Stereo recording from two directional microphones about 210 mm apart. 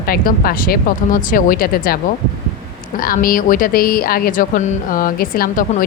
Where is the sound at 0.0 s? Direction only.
45° left (ahead or behind).